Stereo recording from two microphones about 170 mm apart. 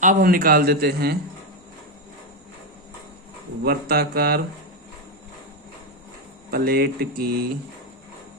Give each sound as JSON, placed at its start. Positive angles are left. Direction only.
{"t": 0.0, "sound": "a man's voice", "side_deg": -55}
{"t": 3.6, "sound": "a man's voice", "side_deg": -65}
{"t": 6.5, "sound": "a man's voice", "side_deg": -65}